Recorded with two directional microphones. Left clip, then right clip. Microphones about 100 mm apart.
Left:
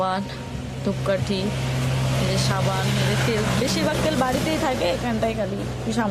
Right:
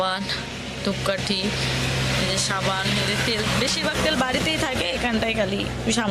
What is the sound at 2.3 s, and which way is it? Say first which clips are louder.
Vehicle: right 1 dB; 20° left (ahead or behind).